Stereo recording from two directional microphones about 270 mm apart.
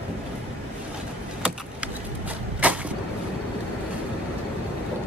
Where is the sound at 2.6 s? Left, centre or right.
Centre.